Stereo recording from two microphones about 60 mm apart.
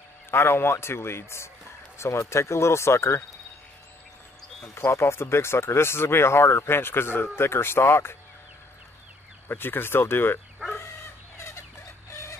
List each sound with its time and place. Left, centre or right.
0.3 s speech: left
4.7 s speech: left
9.5 s speech: left
10.6 s dog: centre
11.3 s fowl: left
12.1 s a sound: left